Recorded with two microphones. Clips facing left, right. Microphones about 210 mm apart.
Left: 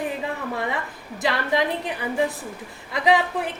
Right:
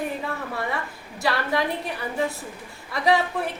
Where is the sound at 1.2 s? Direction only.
20° left (ahead or behind).